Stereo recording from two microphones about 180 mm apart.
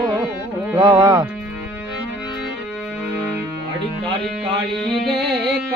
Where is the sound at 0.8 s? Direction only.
25° right (ahead or behind).